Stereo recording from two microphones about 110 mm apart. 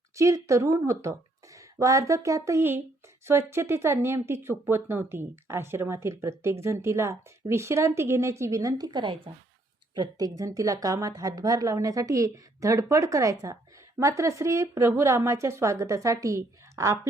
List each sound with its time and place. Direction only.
0.2 s a woman's voice: 30° right (ahead or behind)